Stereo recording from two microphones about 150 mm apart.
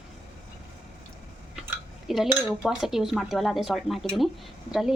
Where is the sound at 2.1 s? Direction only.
5° right (ahead or behind).